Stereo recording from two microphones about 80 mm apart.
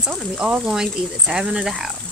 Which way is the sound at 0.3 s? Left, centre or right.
Centre.